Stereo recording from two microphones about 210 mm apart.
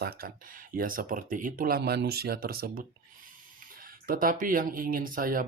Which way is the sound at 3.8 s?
40° right (ahead or behind).